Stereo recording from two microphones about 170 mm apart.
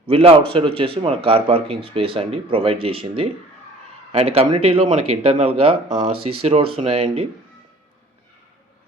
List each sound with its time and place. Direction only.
0.1 s speech: 35° right (ahead or behind)